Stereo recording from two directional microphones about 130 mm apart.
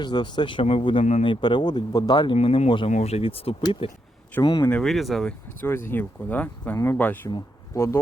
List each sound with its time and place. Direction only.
0.0 s a man's voice: 35° left (ahead or behind)
2.9 s a man's voice: 55° left (ahead or behind)
4.6 s speech: 5° left (ahead or behind)
5.5 s speech: 20° left (ahead or behind)